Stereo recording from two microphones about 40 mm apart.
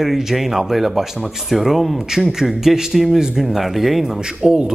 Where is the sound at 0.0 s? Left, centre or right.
Centre.